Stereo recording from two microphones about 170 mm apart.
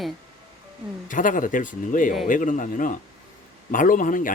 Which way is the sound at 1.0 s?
50° left (ahead or behind).